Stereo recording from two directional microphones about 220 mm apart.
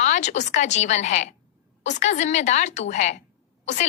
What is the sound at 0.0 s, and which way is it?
A woman's voice, 30° left (ahead or behind).